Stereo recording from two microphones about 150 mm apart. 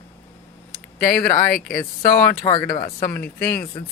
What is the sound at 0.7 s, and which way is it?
Speech, 75° left (ahead or behind).